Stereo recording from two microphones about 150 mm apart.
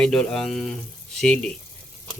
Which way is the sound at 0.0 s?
5° left (ahead or behind).